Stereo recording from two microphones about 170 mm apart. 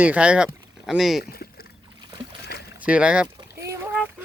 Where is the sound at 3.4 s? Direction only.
15° right (ahead or behind).